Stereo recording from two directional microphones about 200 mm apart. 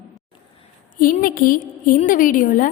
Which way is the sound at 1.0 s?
45° left (ahead or behind).